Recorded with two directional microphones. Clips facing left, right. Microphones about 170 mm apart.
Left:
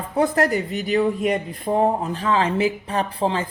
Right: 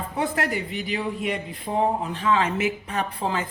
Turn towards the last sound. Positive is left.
turn(degrees=30)  # may be behind; listen again after turning